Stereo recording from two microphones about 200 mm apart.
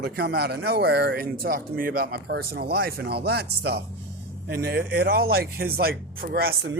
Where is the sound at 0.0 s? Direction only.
55° right (ahead or behind).